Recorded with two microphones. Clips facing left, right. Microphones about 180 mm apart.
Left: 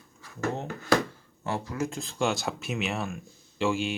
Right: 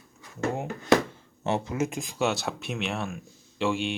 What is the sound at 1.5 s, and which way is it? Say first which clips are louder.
Speech: right 3 dB; 20° right (ahead or behind).